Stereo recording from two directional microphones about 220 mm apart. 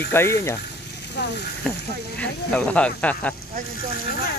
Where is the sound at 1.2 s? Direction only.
50° left (ahead or behind).